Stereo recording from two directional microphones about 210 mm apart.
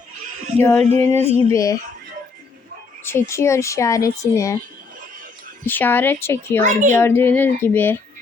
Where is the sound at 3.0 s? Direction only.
10° left (ahead or behind).